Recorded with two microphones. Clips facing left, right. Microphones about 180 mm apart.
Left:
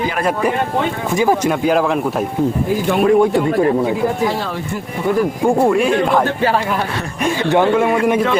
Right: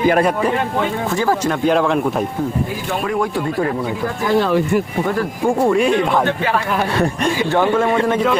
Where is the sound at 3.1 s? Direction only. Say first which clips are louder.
Left 6 dB; 25° left (ahead or behind).